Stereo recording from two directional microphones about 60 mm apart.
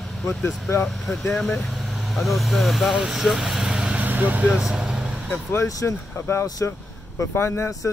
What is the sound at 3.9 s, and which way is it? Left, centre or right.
Vehicle, right.